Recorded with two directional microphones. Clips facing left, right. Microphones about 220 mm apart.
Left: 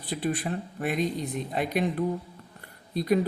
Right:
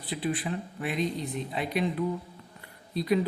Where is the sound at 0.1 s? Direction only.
45° left (ahead or behind).